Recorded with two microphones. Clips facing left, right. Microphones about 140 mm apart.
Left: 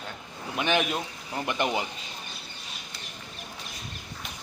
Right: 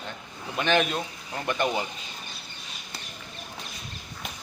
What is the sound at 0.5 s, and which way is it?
A man's voice, 15° left (ahead or behind).